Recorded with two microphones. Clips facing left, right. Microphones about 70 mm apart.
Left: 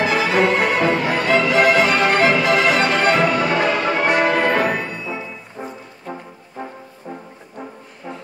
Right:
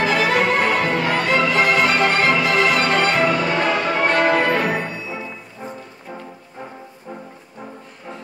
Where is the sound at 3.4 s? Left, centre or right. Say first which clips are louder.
Left 1 dB; centre.